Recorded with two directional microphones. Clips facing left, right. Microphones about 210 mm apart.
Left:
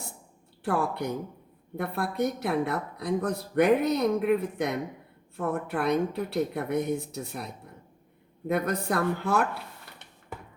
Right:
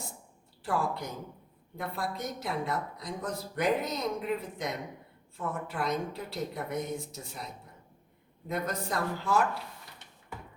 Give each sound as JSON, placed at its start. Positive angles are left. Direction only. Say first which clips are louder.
{"t": 0.6, "sound": "speech", "louder": "left 4 dB", "side_deg": 60}
{"t": 8.4, "sound": "speech", "louder": "left 6 dB", "side_deg": 60}